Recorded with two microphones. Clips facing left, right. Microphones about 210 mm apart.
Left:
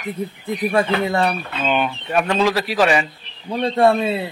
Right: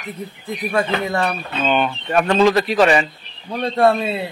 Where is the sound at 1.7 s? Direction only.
5° left (ahead or behind).